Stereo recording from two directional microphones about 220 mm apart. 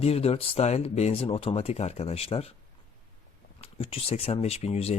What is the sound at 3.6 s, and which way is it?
Speech, 25° left (ahead or behind).